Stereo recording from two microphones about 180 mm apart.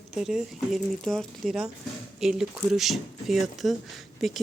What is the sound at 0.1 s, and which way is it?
Speech, centre (ahead or behind).